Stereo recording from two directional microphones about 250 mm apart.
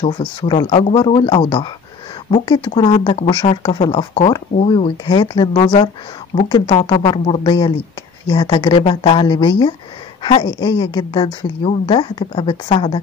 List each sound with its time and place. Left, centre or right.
0.0 s speech: centre
5.6 s speech: left